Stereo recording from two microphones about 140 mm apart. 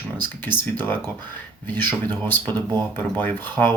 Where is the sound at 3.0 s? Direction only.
15° left (ahead or behind).